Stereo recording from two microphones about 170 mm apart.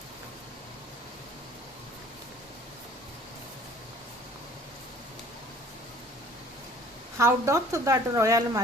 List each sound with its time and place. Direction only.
7.2 s a woman's voice: 15° right (ahead or behind)